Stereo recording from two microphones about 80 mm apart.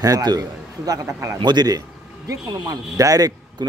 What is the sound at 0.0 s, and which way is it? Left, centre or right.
Speech, right.